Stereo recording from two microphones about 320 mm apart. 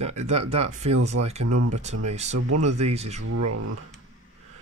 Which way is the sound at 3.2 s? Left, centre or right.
Right.